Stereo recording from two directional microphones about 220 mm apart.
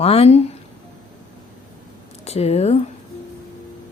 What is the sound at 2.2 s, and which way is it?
Speech, 30° left (ahead or behind).